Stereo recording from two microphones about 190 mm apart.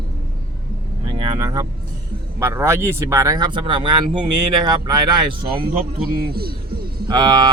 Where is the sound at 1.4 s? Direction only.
20° right (ahead or behind).